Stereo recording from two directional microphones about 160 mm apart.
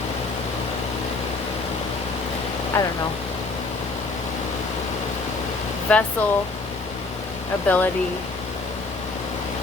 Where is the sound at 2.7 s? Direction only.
15° left (ahead or behind).